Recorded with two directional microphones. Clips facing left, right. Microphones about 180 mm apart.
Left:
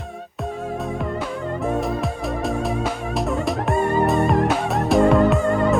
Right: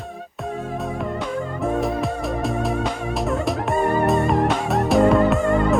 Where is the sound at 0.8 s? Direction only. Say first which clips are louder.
Even; centre (ahead or behind).